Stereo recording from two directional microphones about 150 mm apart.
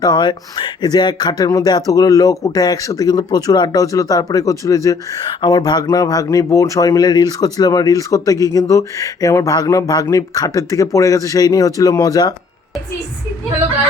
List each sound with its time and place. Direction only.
0.0 s speech: 30° left (ahead or behind)